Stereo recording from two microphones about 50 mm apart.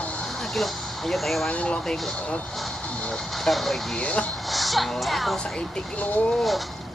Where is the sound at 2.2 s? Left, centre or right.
Left.